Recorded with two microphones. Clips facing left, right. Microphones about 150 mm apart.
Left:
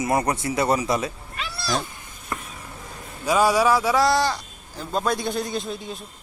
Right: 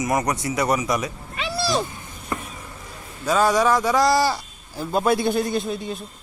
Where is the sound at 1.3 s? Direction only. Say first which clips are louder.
Right 7 dB; centre (ahead or behind).